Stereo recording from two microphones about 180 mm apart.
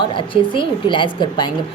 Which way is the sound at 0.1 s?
30° left (ahead or behind).